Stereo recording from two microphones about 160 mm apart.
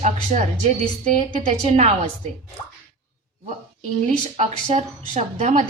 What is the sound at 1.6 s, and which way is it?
Speech, 45° right (ahead or behind).